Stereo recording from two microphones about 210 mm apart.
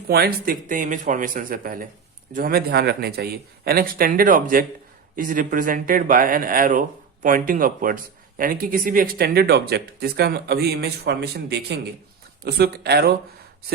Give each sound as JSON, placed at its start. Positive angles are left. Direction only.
{"t": 0.1, "sound": "a man's voice", "side_deg": -45}